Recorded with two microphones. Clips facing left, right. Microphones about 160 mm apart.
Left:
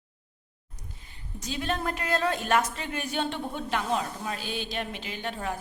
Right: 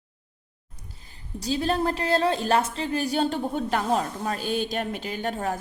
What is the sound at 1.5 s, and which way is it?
A woman's voice, 35° right (ahead or behind).